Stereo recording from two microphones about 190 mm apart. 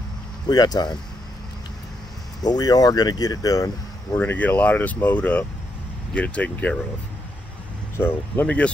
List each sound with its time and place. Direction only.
0.5 s speech: 20° left (ahead or behind)
2.4 s speech: 20° left (ahead or behind)
8.0 s speech: 10° left (ahead or behind)